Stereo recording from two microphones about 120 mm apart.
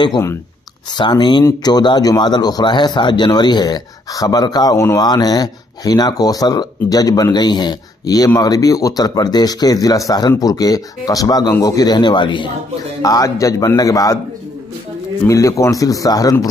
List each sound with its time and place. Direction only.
0.9 s speech: 40° left (ahead or behind)
13.0 s a man's voice: 30° left (ahead or behind)
15.2 s a man's voice: 25° left (ahead or behind)